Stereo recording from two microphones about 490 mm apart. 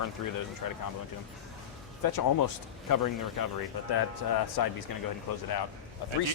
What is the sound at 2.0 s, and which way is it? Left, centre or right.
Speech, left.